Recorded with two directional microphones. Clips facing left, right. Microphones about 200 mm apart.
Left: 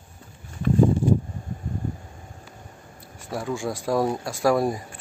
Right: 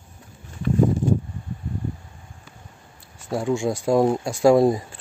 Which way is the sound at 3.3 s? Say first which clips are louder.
Right 5 dB; 25° right (ahead or behind).